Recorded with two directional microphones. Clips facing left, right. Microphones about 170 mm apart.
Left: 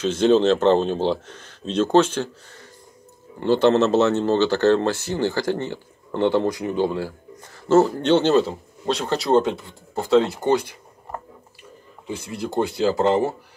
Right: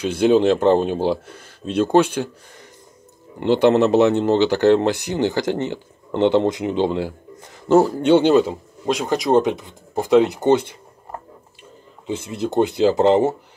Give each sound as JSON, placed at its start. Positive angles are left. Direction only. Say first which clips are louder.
{"t": 0.0, "sound": "speech", "louder": "right 1 dB", "side_deg": -10}
{"t": 12.1, "sound": "speech", "louder": "right 4 dB", "side_deg": -20}